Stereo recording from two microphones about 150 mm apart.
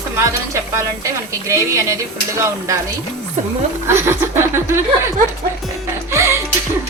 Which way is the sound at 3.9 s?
15° right (ahead or behind).